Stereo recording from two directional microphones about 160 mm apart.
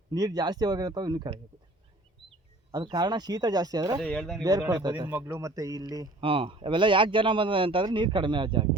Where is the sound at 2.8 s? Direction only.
25° right (ahead or behind).